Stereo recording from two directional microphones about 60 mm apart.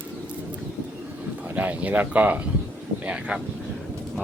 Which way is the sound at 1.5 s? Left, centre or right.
Right.